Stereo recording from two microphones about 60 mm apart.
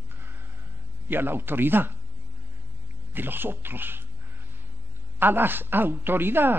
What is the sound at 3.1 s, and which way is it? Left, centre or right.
Speech, right.